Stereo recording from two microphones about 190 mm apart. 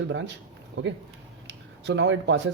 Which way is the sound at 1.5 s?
65° right (ahead or behind).